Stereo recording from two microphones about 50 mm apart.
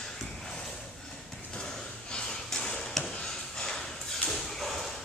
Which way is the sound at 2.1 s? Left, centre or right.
Centre.